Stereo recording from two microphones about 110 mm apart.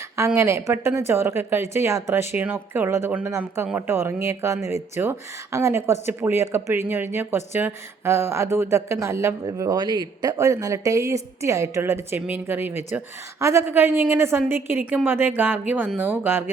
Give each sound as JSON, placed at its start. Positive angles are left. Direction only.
{"t": 0.2, "sound": "speech", "side_deg": -25}